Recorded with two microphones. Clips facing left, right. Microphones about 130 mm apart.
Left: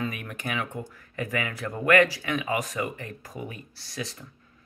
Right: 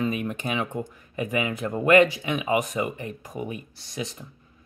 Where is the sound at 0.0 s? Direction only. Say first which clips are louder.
Right 6 dB; 25° right (ahead or behind).